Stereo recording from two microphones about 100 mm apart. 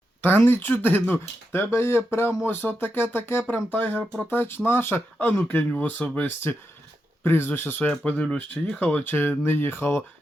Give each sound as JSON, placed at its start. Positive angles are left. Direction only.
{"t": 0.2, "sound": "speech", "side_deg": 20}